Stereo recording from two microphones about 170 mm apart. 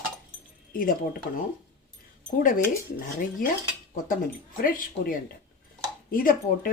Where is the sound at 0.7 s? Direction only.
55° left (ahead or behind).